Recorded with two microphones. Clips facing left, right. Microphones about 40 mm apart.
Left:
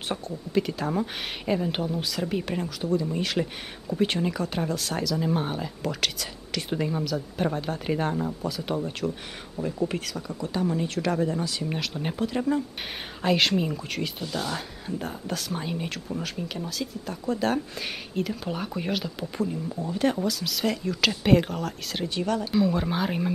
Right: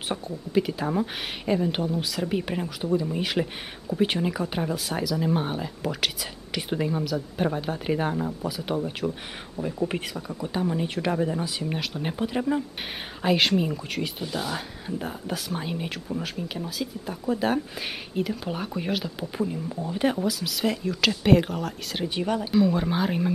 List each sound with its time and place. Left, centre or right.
0.1 s speech: centre
10.1 s speech: centre
20.2 s speech: centre
22.1 s speech: centre
22.5 s speech: centre